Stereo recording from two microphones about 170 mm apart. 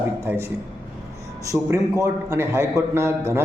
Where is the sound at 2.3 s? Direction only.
15° right (ahead or behind).